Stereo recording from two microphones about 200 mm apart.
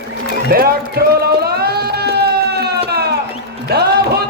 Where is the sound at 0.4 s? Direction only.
50° right (ahead or behind).